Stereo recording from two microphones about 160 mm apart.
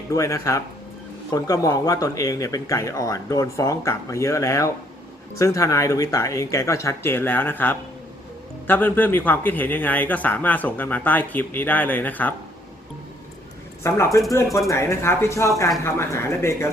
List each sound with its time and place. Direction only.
0.1 s a man's voice: 20° left (ahead or behind)
13.8 s a man's voice: 15° left (ahead or behind)